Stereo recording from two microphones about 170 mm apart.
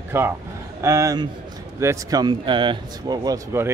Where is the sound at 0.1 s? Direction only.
15° right (ahead or behind).